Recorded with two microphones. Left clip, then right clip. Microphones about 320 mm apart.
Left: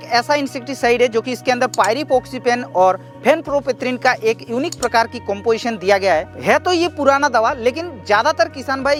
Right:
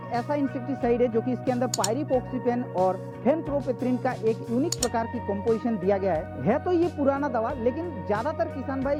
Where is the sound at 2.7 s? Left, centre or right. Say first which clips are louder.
Left 11 dB; centre.